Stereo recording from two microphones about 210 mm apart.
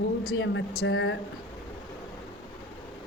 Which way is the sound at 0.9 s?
70° left (ahead or behind).